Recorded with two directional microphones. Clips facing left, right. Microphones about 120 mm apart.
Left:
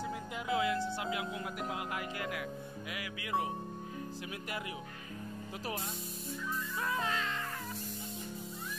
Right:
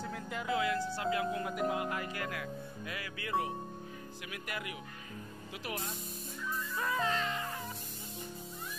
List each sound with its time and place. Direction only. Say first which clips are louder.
0.0 s music: even; 10° left (ahead or behind)
0.6 s speech: left 1 dB; 20° left (ahead or behind); by 2.0 s 5° left (ahead or behind)
2.1 s speech: even; 20° left (ahead or behind)
6.8 s music: right 3 dB; centre (ahead or behind)